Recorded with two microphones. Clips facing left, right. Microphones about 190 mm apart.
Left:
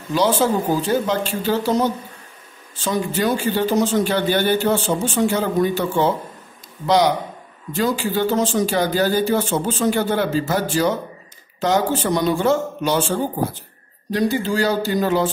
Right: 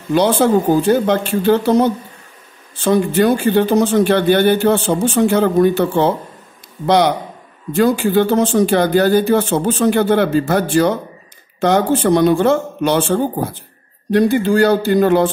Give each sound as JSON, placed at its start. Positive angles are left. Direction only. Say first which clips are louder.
{"t": 0.1, "sound": "a man's voice", "louder": "right 5 dB", "side_deg": -60}
{"t": 7.7, "sound": "a man's voice", "louder": "right 7 dB", "side_deg": -55}